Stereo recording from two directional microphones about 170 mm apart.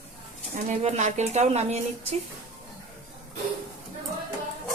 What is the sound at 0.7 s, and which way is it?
A woman's voice, 40° right (ahead or behind).